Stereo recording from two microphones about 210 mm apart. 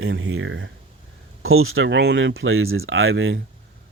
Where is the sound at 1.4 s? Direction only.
75° right (ahead or behind).